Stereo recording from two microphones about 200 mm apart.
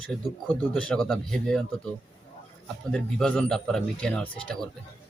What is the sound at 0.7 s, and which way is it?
A man's voice, 5° left (ahead or behind).